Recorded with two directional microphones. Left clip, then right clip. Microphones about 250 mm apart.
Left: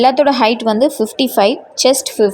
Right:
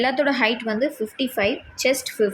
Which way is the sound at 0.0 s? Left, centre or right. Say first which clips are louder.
Left 9 dB; left.